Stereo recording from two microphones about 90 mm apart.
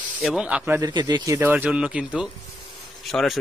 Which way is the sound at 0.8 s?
50° right (ahead or behind).